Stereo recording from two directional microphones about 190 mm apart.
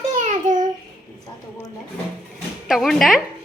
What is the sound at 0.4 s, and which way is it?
Child singing, 45° right (ahead or behind).